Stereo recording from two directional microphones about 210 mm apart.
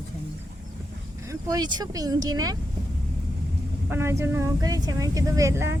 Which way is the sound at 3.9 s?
10° right (ahead or behind).